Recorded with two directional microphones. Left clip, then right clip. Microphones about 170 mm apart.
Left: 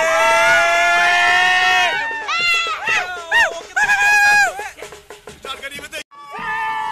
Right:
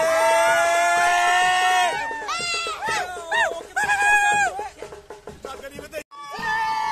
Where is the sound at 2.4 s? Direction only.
15° right (ahead or behind).